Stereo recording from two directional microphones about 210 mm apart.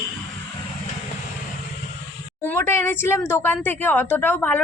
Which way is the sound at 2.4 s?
10° left (ahead or behind).